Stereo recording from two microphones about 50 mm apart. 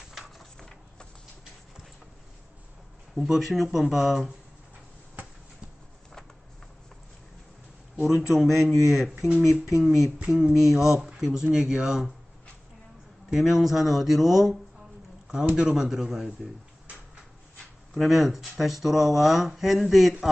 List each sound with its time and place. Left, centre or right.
0.1 s a sound: centre
0.5 s a sound: centre
3.2 s speech: centre
8.3 s speech: centre
10.2 s speech: centre
10.5 s speech: centre
13.3 s speech: centre
15.5 s speech: centre
17.9 s speech: centre